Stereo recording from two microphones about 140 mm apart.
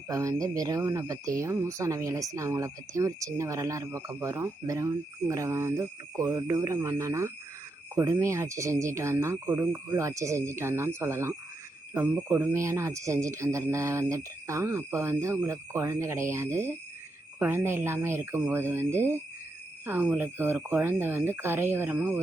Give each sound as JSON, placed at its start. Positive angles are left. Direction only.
{"t": 0.1, "sound": "speech", "side_deg": -25}